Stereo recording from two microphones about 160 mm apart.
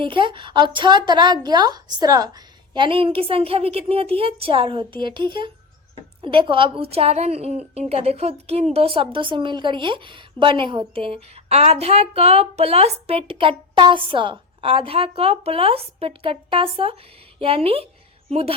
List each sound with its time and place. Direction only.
0.0 s a woman's voice: 30° right (ahead or behind)